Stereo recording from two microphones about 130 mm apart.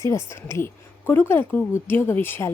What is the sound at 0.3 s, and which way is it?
A woman's voice, 20° left (ahead or behind).